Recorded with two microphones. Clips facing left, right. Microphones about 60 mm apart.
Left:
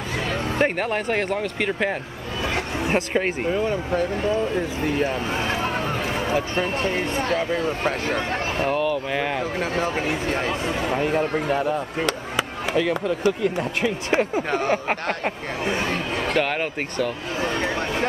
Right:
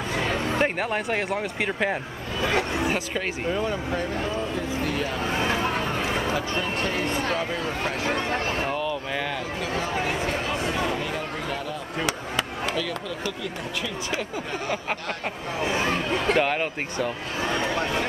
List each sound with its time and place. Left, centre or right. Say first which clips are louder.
0.6 s speech: left 6 dB; centre
2.9 s speech: left 5 dB; left
4.6 s speech: left 4 dB; left
5.4 s speech: right 3 dB; centre
6.3 s speech: left 3 dB; left
11.0 s speech: left 8 dB; left
14.7 s speech: left 6 dB; left
16.4 s speech: left 1 dB; centre